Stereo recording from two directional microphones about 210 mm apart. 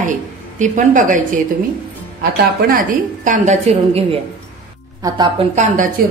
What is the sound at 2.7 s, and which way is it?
A woman's voice, 40° right (ahead or behind).